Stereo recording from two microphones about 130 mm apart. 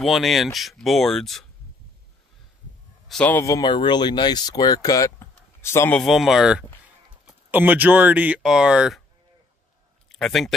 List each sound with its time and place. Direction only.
0.0 s speech: centre (ahead or behind)
3.1 s speech: 10° left (ahead or behind)
3.3 s speech: 25° left (ahead or behind)
5.9 s speech: centre (ahead or behind)
10.0 s a sound: centre (ahead or behind)